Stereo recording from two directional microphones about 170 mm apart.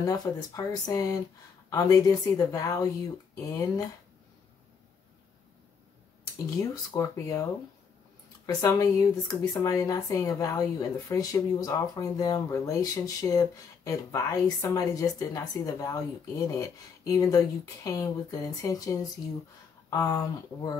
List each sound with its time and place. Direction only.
0.0 s speech: 20° left (ahead or behind)
6.3 s speech: 25° left (ahead or behind)
8.5 s speech: 20° left (ahead or behind)
19.9 s speech: 20° left (ahead or behind)